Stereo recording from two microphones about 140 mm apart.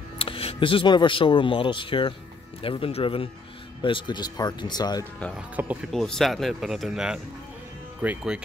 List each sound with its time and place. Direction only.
0.2 s speech: 40° left (ahead or behind)
5.9 s speech: centre (ahead or behind)